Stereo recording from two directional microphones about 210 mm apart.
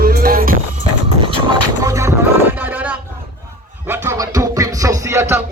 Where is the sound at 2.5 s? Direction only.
10° right (ahead or behind).